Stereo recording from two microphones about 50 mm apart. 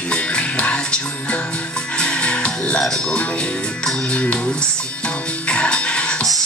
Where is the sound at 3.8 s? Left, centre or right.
Left.